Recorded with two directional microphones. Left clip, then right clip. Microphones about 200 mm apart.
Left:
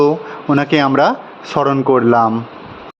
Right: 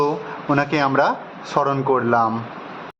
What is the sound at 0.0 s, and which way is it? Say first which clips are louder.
Speech: left 7 dB; 30° left (ahead or behind).